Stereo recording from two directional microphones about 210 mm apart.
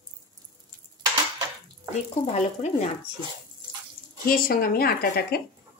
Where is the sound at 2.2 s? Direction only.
30° left (ahead or behind).